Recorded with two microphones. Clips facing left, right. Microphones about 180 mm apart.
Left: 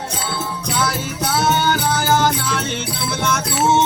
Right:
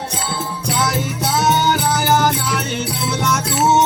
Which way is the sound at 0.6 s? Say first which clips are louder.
Right 3 dB; 20° right (ahead or behind).